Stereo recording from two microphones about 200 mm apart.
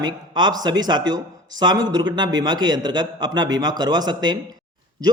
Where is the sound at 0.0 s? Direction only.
20° right (ahead or behind).